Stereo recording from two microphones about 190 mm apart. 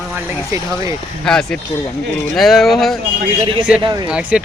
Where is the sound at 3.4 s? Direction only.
25° right (ahead or behind).